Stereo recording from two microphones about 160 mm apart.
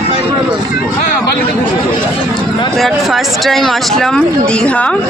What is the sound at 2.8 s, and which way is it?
Speech, centre (ahead or behind).